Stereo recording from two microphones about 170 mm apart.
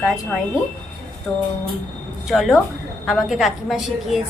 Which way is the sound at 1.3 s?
5° right (ahead or behind).